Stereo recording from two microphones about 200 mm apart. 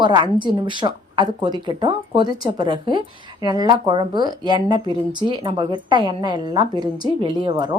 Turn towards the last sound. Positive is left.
turn(degrees=-25)  # may be behind; listen again after turning